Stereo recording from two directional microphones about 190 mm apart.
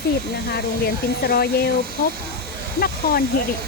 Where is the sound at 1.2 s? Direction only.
55° left (ahead or behind).